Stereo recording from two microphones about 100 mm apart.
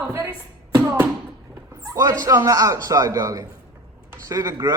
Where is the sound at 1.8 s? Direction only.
35° right (ahead or behind).